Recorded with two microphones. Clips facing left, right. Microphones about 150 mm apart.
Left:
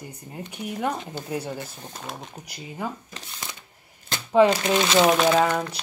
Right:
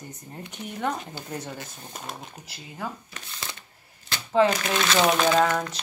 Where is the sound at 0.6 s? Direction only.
10° left (ahead or behind).